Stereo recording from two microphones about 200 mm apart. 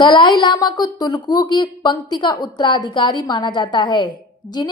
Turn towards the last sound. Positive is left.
turn(degrees=20)  # may be behind; listen again after turning